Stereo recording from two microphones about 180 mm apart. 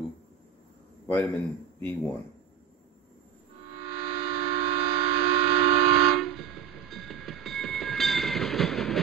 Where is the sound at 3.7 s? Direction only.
65° left (ahead or behind).